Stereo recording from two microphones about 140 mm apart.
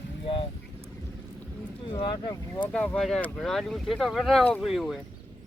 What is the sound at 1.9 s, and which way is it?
Speech, 35° left (ahead or behind).